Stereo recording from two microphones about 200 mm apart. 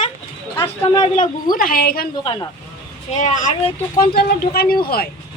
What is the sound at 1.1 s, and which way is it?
Speech, 40° left (ahead or behind).